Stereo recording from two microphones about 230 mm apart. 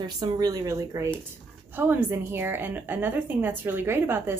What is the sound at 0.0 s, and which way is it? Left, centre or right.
A woman's voice, centre.